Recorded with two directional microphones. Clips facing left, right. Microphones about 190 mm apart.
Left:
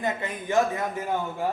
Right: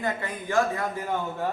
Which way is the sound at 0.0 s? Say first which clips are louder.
Left 1 dB; 20° left (ahead or behind).